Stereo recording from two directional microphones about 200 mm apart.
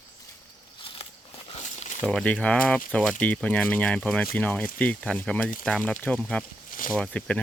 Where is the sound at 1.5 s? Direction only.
35° left (ahead or behind).